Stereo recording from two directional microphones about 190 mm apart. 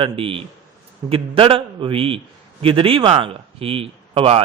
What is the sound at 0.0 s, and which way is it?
A man's voice, 30° right (ahead or behind).